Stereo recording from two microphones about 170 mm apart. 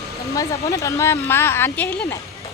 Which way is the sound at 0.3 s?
20° left (ahead or behind).